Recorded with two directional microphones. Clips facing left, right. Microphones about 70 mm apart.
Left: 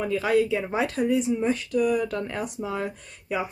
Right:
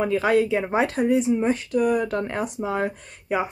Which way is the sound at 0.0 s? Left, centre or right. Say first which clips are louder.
Right 3 dB; right.